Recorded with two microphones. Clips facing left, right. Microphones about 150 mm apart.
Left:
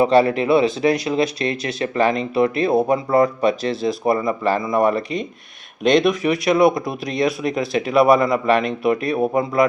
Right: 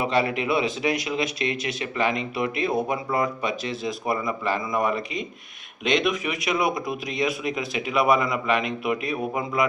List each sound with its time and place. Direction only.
0.0 s speech: 35° left (ahead or behind)